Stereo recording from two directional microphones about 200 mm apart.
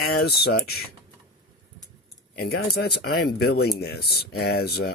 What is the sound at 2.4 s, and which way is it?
Speech, 50° left (ahead or behind).